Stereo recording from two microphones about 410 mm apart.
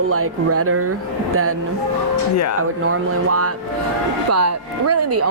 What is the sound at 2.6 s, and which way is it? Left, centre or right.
A woman's voice, right.